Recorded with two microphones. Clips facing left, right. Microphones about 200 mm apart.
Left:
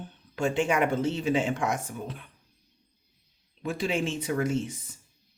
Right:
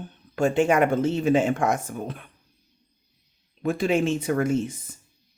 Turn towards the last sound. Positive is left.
turn(degrees=-50)  # may be behind; listen again after turning